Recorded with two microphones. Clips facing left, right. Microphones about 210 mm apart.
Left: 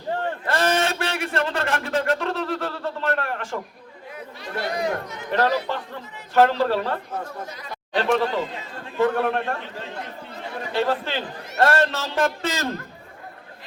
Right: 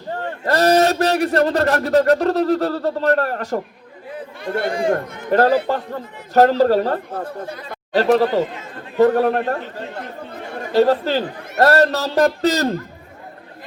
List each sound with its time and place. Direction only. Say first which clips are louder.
0.4 s speech: right 9 dB; 40° right (ahead or behind)
4.4 s speech: right 7 dB; 50° right (ahead or behind)
4.7 s speech: right 5 dB; 30° right (ahead or behind)
5.0 s speech: right 7 dB; 50° right (ahead or behind)
10.7 s speech: right 9 dB; 40° right (ahead or behind)